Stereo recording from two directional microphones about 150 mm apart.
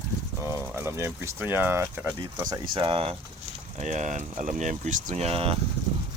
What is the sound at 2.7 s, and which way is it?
Speech, 35° right (ahead or behind).